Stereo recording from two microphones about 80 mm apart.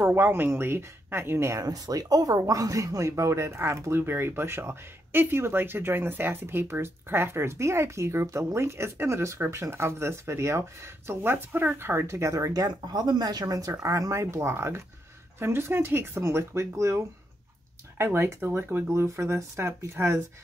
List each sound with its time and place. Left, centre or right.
0.0 s speech: right
1.6 s speech: right
13.7 s speech: right